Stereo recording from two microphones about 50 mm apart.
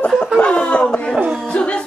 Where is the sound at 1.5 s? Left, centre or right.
Centre.